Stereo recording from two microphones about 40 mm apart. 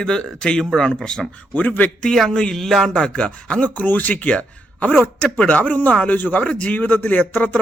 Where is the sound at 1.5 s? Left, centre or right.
Left.